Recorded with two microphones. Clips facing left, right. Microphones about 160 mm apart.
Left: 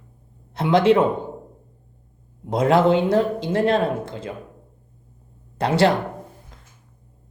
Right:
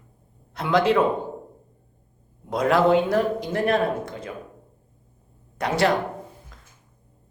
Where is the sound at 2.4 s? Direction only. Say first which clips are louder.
Left 2 dB; 25° left (ahead or behind).